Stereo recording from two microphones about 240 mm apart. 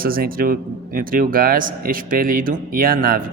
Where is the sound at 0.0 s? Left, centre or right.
Right.